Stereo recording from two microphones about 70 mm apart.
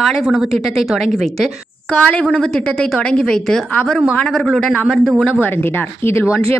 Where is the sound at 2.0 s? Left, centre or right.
Centre.